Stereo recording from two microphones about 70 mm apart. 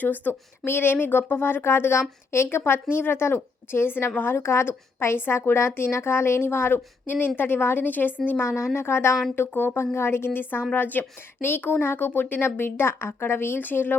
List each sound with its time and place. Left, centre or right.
0.0 s a woman's voice: left